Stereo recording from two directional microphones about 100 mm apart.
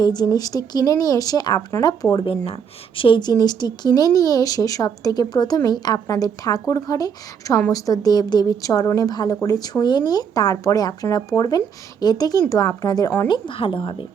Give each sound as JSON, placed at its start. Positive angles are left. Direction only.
{"t": 0.0, "sound": "speech", "side_deg": 45}
{"t": 2.2, "sound": "speech", "side_deg": 70}